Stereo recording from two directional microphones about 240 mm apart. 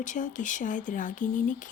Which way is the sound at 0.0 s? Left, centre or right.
Left.